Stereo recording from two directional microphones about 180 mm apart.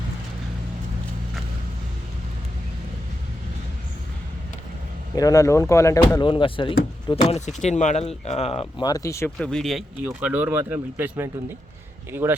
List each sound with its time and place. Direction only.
5.1 s speech: 20° left (ahead or behind)
7.2 s speech: 40° left (ahead or behind)
8.8 s speech: 20° left (ahead or behind); by 12.4 s 10° right (ahead or behind)